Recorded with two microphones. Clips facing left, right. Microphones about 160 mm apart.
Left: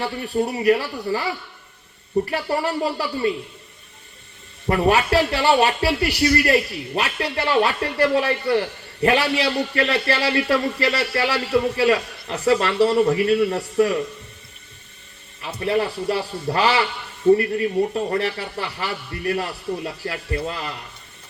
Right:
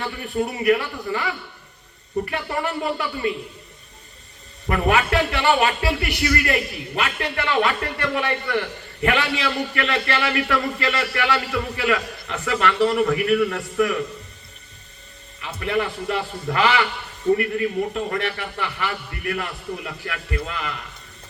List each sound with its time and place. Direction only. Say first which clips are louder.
0.0 s speech: left 2 dB; 30° left (ahead or behind)
2.3 s speech: left 3 dB; 35° left (ahead or behind)
4.7 s speech: left 2 dB; 35° left (ahead or behind)
15.4 s speech: left 2 dB; 35° left (ahead or behind)